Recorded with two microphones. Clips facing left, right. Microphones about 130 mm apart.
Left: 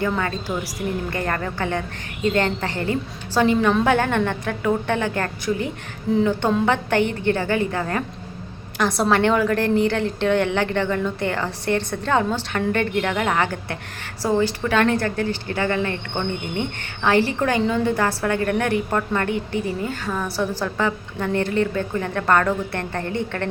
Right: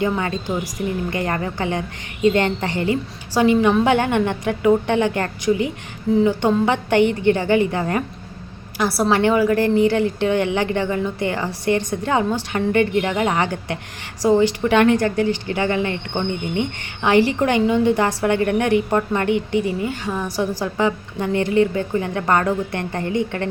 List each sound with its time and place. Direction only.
0.0 s a woman's voice: 20° right (ahead or behind)
8.8 s a woman's voice: 10° right (ahead or behind)